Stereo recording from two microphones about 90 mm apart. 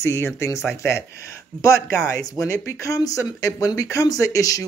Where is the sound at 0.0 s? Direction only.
30° left (ahead or behind).